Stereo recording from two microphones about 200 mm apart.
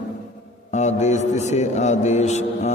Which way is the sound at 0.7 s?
35° left (ahead or behind).